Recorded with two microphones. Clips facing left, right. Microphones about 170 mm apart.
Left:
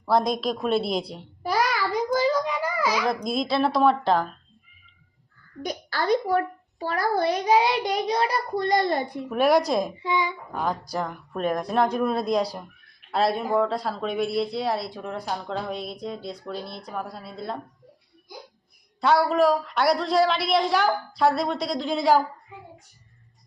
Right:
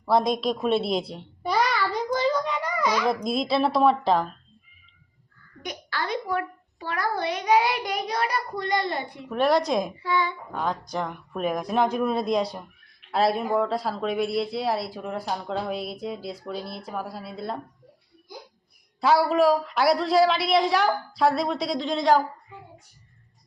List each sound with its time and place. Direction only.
0.0 s a child's voice: centre (ahead or behind)
5.6 s a child's voice: 40° left (ahead or behind)
9.3 s a woman's voice: 10° left (ahead or behind)
10.0 s a woman's voice: 15° left (ahead or behind)
10.5 s speech: 5° left (ahead or behind)
18.9 s speech: centre (ahead or behind)